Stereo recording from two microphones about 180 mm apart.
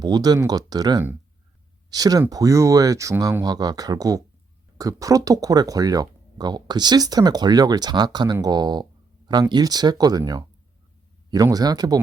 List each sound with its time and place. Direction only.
0.0 s speech: 20° right (ahead or behind)